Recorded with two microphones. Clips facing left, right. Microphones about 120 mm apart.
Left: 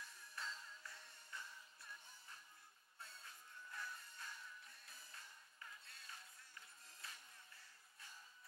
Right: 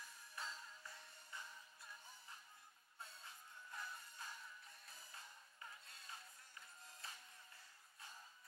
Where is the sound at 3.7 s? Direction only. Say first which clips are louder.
Even; 25° right (ahead or behind).